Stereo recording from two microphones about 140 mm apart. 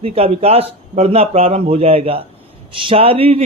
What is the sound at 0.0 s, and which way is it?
A man's voice, 45° right (ahead or behind).